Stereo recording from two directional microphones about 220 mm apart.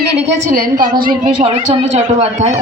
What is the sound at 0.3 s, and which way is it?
Speech, 40° right (ahead or behind).